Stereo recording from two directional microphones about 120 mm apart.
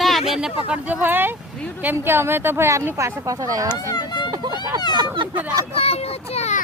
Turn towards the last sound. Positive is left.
turn(degrees=65)  # may be behind; listen again after turning